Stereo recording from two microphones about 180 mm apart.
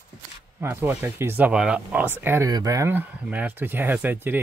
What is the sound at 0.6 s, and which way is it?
Speech, 10° right (ahead or behind).